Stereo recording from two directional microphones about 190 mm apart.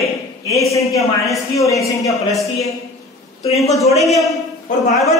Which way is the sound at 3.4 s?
35° left (ahead or behind).